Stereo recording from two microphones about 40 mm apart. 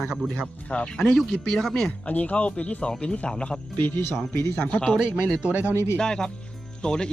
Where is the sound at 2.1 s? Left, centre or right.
Left; by 3.6 s centre.